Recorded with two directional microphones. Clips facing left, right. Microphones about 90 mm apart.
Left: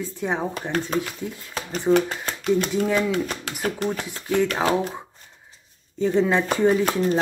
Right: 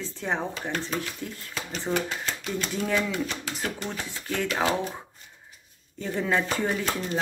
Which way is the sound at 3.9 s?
15° left (ahead or behind).